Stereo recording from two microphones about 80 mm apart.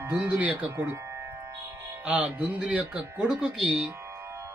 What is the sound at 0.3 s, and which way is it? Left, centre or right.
Speech, centre.